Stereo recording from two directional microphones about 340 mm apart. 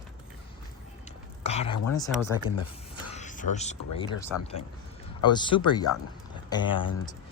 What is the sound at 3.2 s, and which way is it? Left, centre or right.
Music, left.